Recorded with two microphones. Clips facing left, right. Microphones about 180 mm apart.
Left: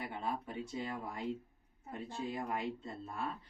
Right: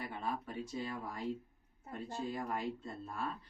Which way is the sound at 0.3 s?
15° left (ahead or behind).